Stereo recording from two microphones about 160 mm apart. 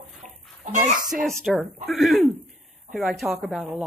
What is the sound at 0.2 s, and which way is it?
Chicken, 50° right (ahead or behind).